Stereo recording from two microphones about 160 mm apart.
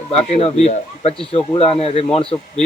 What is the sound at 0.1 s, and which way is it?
Speech, 40° left (ahead or behind).